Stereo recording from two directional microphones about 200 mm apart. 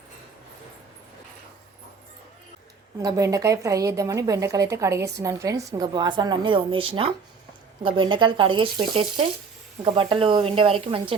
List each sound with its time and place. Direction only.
3.0 s a woman's voice: 15° right (ahead or behind)